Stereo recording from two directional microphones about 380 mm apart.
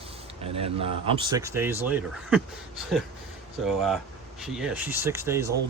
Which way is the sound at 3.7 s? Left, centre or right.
Centre.